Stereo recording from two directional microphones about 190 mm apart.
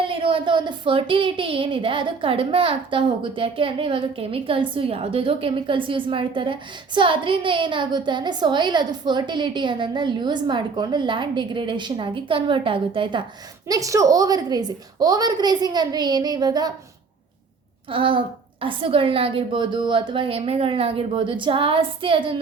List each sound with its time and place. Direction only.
0.0 s a child's voice: 30° right (ahead or behind)
17.8 s a child's voice: 25° right (ahead or behind)